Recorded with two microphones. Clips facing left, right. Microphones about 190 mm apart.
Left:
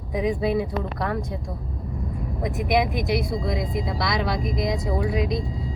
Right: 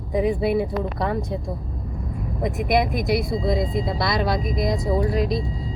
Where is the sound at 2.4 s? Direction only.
Centre (ahead or behind).